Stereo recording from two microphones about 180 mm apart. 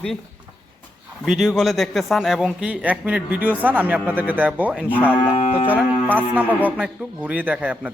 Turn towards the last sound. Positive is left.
turn(degrees=-10)  # may be behind; listen again after turning